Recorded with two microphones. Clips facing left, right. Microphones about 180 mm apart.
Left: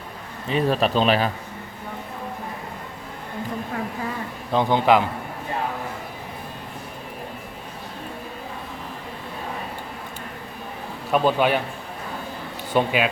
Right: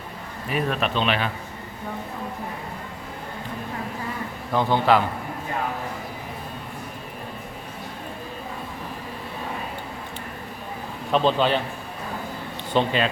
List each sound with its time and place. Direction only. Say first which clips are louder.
0.4 s a man's voice: left 4 dB; 30° left (ahead or behind)
4.5 s a man's voice: left 2 dB; 15° left (ahead or behind)
11.1 s a man's voice: left 1 dB; 10° left (ahead or behind)
12.7 s a man's voice: left 1 dB; 10° left (ahead or behind)